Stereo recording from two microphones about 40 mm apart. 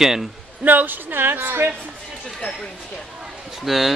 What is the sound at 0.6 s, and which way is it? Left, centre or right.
Speech, right.